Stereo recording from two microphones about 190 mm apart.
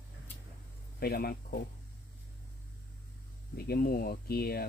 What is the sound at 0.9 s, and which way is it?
Speech, 55° left (ahead or behind).